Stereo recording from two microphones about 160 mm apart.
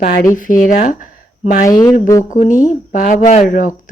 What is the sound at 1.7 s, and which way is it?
Speech, 20° left (ahead or behind).